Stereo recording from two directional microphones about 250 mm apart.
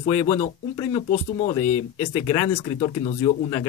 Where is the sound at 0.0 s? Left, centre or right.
Centre.